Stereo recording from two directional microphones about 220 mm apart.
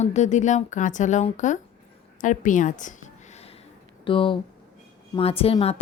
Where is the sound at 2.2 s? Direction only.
35° left (ahead or behind).